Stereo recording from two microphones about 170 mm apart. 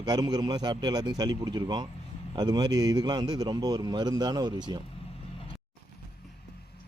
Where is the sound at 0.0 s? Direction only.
25° right (ahead or behind).